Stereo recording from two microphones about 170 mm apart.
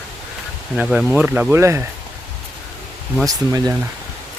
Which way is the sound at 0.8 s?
5° right (ahead or behind).